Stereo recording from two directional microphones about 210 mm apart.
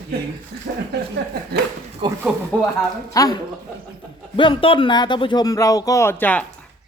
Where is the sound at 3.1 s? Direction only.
15° left (ahead or behind).